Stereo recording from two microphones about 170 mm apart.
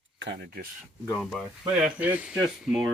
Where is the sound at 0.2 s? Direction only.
90° right.